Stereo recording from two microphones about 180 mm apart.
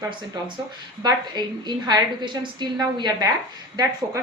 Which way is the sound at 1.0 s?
20° right (ahead or behind).